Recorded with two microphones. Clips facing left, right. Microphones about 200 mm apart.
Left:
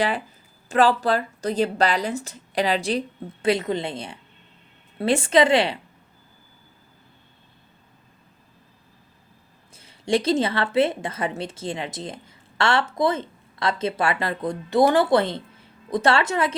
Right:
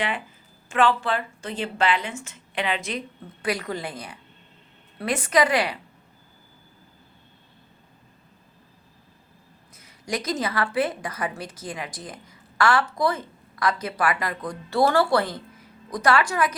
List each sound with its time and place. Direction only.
0.7 s a woman's voice: 40° left (ahead or behind)
9.7 s a woman's voice: 30° left (ahead or behind)